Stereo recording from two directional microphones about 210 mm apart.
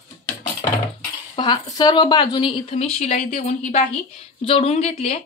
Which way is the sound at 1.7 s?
20° left (ahead or behind).